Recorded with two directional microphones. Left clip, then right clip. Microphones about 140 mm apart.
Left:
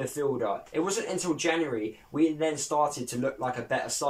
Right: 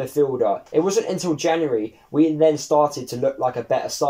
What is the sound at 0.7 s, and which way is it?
Speech, 45° right (ahead or behind).